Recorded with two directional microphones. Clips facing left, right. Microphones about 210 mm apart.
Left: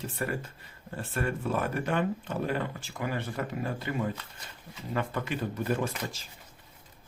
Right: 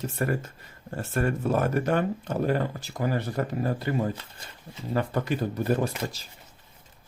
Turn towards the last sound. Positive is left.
turn(degrees=-35)  # may be behind; listen again after turning